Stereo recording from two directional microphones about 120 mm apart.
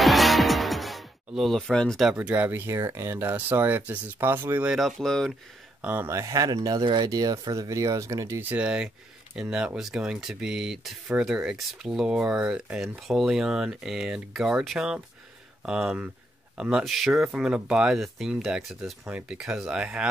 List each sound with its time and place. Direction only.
0.0 s music: centre (ahead or behind)
2.0 s speech: 10° right (ahead or behind)
4.6 s speech: centre (ahead or behind)
5.8 s speech: 15° right (ahead or behind)
6.0 s speech: 25° right (ahead or behind)
8.5 s speech: 10° right (ahead or behind)